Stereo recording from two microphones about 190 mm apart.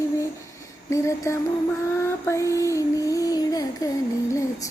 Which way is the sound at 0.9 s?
15° left (ahead or behind).